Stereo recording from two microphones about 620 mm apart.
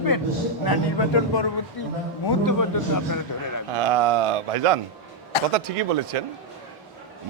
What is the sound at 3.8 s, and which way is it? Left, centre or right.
Speech, right.